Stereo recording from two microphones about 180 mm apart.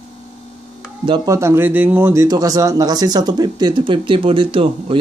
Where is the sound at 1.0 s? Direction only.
20° right (ahead or behind).